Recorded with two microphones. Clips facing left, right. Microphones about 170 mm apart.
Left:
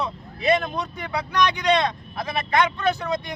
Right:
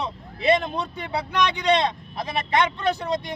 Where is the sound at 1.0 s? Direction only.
30° right (ahead or behind).